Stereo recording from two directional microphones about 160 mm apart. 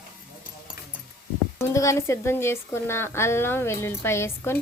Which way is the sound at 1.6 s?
15° left (ahead or behind).